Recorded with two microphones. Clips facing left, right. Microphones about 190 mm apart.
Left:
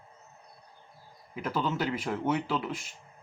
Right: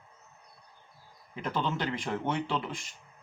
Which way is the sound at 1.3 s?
5° left (ahead or behind).